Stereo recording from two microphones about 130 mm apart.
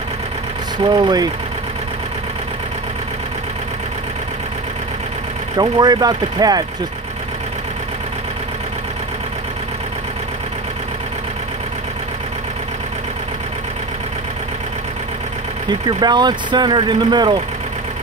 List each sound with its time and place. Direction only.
0.8 s speech: 35° right (ahead or behind)
5.6 s speech: 30° right (ahead or behind)
16.0 s speech: 35° right (ahead or behind)